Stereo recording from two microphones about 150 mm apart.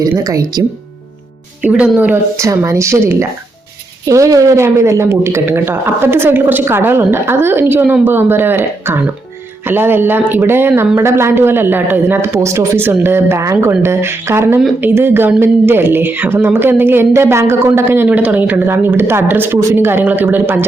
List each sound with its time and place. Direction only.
0.2 s speech: 25° right (ahead or behind)
1.6 s speech: 5° right (ahead or behind)